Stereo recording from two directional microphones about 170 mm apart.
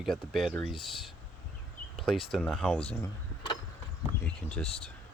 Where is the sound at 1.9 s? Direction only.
Centre (ahead or behind).